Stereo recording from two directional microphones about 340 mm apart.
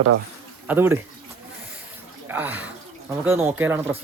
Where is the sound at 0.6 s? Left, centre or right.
Centre.